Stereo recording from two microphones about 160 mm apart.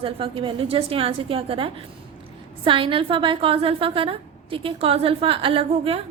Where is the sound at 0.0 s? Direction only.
35° right (ahead or behind).